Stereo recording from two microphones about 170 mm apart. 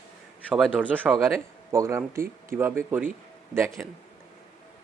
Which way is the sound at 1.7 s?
15° right (ahead or behind).